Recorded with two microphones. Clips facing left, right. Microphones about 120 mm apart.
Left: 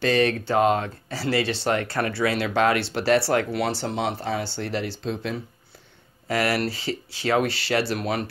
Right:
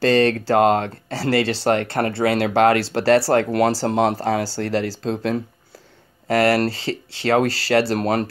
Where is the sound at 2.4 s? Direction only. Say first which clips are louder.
Right 6 dB; 70° right (ahead or behind).